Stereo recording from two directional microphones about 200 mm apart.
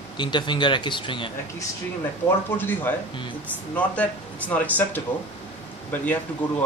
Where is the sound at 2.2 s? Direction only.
10° left (ahead or behind).